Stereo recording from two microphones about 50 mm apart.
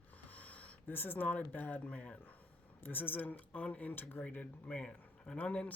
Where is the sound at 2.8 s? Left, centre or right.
Left.